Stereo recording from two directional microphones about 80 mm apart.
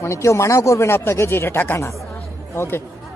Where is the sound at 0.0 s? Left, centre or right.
Left.